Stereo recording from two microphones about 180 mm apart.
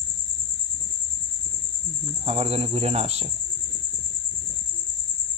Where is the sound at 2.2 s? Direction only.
35° right (ahead or behind).